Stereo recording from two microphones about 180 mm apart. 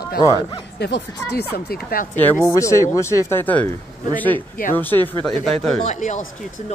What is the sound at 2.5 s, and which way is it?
Speech, 15° left (ahead or behind).